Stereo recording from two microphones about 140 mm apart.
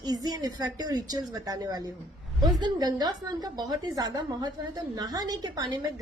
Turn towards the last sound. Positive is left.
turn(degrees=-30)  # may be behind; listen again after turning